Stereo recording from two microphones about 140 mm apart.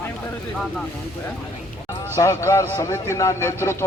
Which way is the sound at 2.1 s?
20° left (ahead or behind).